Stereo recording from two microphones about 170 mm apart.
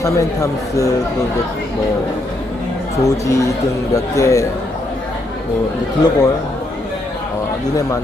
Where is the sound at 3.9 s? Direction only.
20° left (ahead or behind).